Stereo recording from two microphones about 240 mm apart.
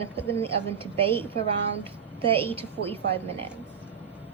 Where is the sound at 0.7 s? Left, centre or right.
Right.